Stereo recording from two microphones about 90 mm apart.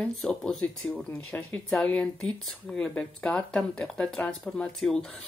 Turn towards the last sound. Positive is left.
turn(degrees=5)  # may be behind; listen again after turning